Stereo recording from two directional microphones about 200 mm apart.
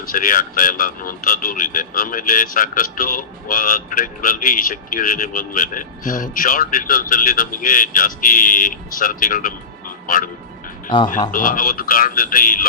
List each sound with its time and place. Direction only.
0.1 s speech: 45° left (ahead or behind)
11.3 s speech: 45° left (ahead or behind)